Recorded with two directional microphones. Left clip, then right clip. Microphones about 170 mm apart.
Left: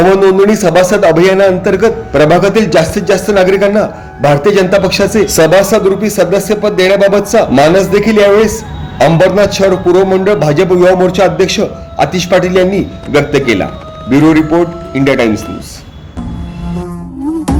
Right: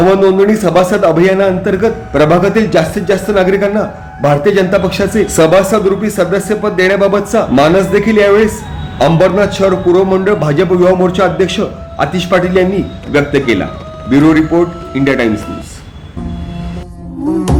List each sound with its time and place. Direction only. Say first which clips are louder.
0.0 s a man's voice: left 2 dB; 35° left (ahead or behind)